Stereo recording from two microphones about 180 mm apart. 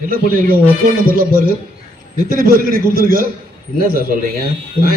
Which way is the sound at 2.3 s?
50° right (ahead or behind).